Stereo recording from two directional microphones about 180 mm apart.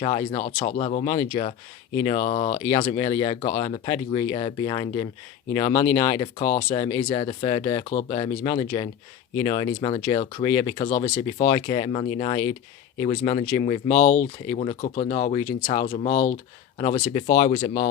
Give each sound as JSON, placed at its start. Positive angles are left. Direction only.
{"t": 0.0, "sound": "speech", "side_deg": 25}
{"t": 0.3, "sound": "speech", "side_deg": 40}
{"t": 2.0, "sound": "speech", "side_deg": 25}
{"t": 2.9, "sound": "speech", "side_deg": 20}
{"t": 6.2, "sound": "speech", "side_deg": 40}
{"t": 6.8, "sound": "speech", "side_deg": 20}
{"t": 10.8, "sound": "speech", "side_deg": 45}
{"t": 11.4, "sound": "speech", "side_deg": 25}
{"t": 13.8, "sound": "speech", "side_deg": 40}
{"t": 14.4, "sound": "speech", "side_deg": 25}
{"t": 16.7, "sound": "speech", "side_deg": 25}
{"t": 17.2, "sound": "speech", "side_deg": 45}